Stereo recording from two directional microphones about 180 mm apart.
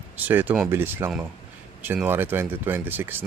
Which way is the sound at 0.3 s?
10° right (ahead or behind).